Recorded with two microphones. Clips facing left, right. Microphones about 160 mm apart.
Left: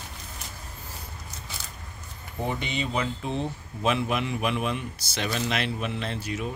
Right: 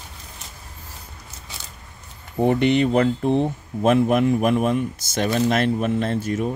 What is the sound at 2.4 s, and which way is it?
Speech, 60° right (ahead or behind).